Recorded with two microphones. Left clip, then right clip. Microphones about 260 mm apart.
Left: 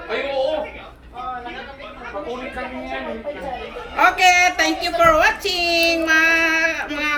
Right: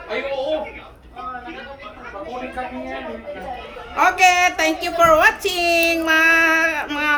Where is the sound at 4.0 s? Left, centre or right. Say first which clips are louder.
Even; centre.